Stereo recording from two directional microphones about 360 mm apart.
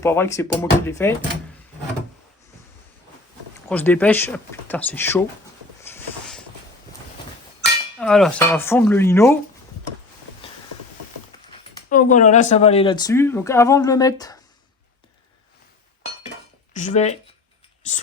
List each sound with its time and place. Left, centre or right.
0.0 s speech: centre
3.7 s speech: centre
5.8 s a sound: centre
7.9 s speech: centre
11.9 s speech: left
16.7 s a sound: centre